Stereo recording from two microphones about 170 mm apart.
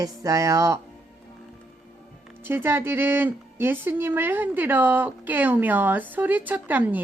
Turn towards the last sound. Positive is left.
turn(degrees=-10)  # may be behind; listen again after turning